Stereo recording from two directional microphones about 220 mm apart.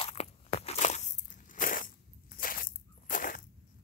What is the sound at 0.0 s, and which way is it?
Biting, 30° left (ahead or behind).